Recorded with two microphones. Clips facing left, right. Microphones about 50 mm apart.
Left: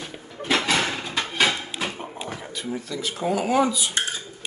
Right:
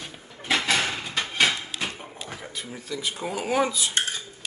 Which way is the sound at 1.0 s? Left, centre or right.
Centre.